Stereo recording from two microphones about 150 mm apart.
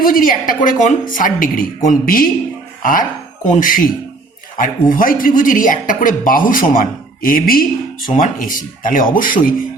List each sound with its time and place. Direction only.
0.0 s speech: 70° left (ahead or behind)